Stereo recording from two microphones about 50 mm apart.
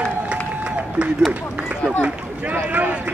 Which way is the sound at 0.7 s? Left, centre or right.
Right.